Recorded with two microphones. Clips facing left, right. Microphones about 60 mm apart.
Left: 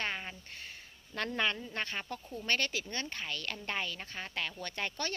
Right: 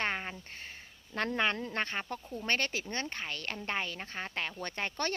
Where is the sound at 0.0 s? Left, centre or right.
Right.